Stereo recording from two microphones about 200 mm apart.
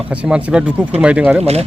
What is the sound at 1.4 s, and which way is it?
Speech, 30° right (ahead or behind).